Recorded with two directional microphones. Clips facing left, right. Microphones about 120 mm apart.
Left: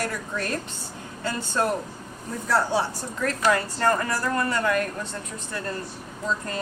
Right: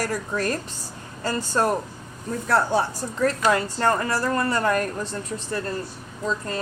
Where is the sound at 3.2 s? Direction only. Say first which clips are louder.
Right 2 dB; 25° right (ahead or behind).